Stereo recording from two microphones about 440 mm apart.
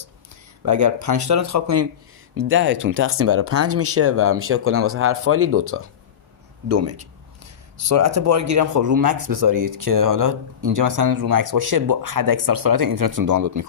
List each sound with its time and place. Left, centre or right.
0.6 s speech: right